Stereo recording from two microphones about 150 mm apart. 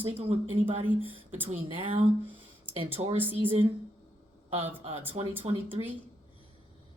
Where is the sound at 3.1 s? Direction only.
10° right (ahead or behind).